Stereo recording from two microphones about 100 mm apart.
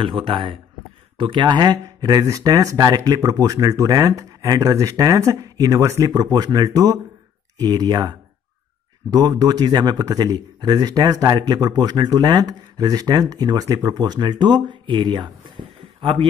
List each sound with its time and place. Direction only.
0.0 s speech: 60° right (ahead or behind)
9.1 s speech: 40° right (ahead or behind); by 16.3 s 60° right (ahead or behind)